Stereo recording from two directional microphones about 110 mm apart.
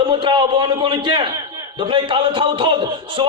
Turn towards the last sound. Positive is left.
turn(degrees=-50)  # may be behind; listen again after turning